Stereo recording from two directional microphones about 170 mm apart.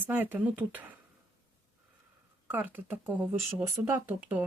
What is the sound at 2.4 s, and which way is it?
Speech, 10° right (ahead or behind).